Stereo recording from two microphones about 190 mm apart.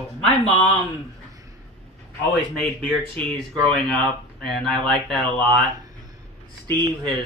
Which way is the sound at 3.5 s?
5° left (ahead or behind).